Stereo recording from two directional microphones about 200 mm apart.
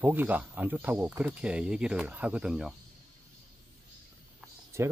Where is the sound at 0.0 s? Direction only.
10° right (ahead or behind).